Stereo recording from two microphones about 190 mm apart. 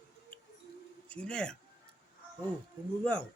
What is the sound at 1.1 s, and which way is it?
Speech, 5° left (ahead or behind).